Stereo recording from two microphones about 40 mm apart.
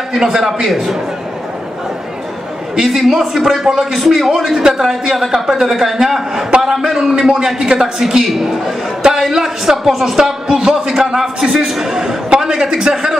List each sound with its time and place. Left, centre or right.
0.1 s a man's voice: centre
2.8 s a man's voice: centre